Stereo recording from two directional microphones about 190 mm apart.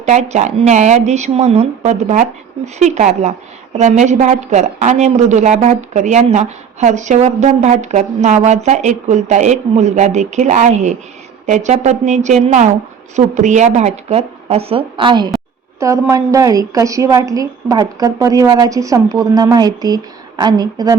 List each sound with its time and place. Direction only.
0.0 s a woman's voice: 35° right (ahead or behind); by 20.9 s 20° right (ahead or behind)